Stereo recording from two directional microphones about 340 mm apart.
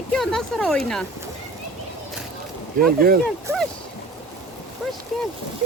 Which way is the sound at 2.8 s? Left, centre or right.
Right.